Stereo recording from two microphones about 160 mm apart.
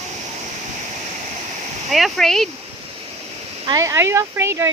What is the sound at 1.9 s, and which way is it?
Speech, centre (ahead or behind).